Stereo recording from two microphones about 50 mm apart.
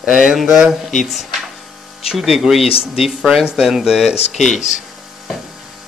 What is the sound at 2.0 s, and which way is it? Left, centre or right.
Speech, centre.